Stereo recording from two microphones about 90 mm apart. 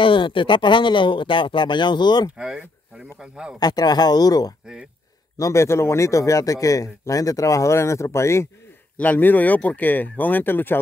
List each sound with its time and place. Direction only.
0.0 s speech: 70° left (ahead or behind)
2.3 s speech: 10° right (ahead or behind)
3.5 s speech: 50° left (ahead or behind)
5.4 s a man's voice: 30° left (ahead or behind)
8.9 s speech: 20° left (ahead or behind)